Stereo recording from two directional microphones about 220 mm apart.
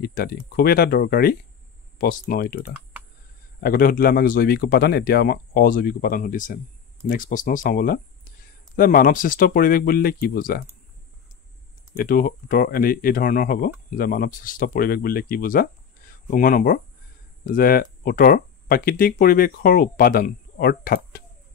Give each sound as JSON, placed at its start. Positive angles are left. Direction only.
{"t": 0.0, "sound": "speech", "side_deg": 40}
{"t": 2.9, "sound": "a sound", "side_deg": -5}
{"t": 3.6, "sound": "speech", "side_deg": 40}
{"t": 12.0, "sound": "speech", "side_deg": 40}